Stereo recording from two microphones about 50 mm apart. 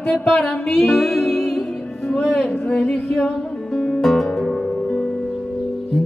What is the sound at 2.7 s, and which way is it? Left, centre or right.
Music, left.